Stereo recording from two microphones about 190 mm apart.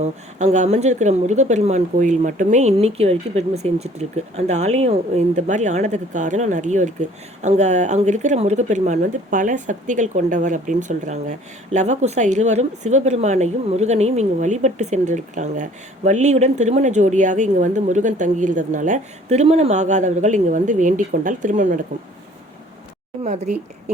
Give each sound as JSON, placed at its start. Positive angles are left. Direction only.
{"t": 0.0, "sound": "speech", "side_deg": -35}
{"t": 23.2, "sound": "speech", "side_deg": -35}